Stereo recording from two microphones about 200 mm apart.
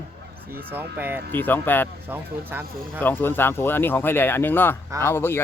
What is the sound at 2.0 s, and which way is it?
Speech, 10° right (ahead or behind).